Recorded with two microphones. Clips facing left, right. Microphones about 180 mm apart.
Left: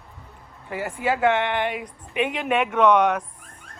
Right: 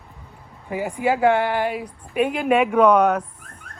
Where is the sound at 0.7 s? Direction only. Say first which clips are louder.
Right 3 dB; 5° right (ahead or behind).